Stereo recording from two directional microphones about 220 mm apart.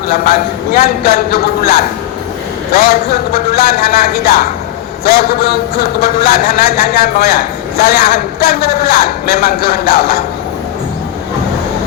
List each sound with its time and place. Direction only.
0.1 s a man's voice: 40° left (ahead or behind)